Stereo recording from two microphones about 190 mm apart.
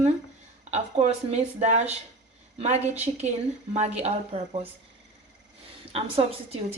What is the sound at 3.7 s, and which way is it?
Speech, 35° right (ahead or behind).